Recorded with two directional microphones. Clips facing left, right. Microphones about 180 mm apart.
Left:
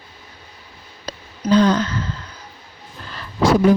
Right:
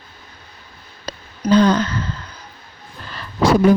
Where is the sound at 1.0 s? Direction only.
65° right (ahead or behind).